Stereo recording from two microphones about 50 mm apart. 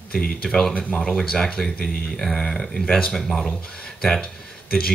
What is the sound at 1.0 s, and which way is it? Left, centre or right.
Speech, centre.